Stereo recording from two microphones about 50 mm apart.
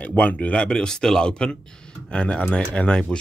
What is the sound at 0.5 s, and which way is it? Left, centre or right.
Speech, centre.